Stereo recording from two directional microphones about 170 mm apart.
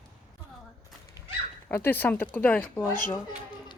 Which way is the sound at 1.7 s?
10° left (ahead or behind).